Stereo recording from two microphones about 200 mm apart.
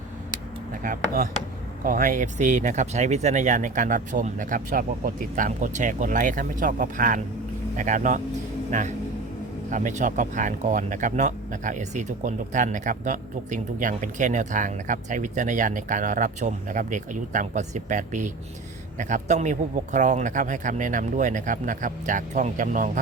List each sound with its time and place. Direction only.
0.3 s a sound: 40° right (ahead or behind)
1.8 s speech: 40° right (ahead or behind)
9.6 s speech: 40° right (ahead or behind)